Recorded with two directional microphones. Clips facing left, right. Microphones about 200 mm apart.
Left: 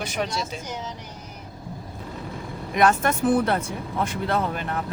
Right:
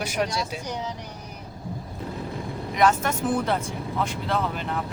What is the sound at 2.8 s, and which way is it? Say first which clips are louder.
Speech: left 2 dB; 60° left (ahead or behind).